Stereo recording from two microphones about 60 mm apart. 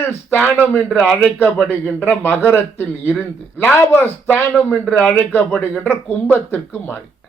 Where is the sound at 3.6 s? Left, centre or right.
Left.